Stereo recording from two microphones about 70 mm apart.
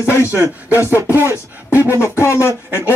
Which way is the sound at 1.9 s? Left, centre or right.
Left.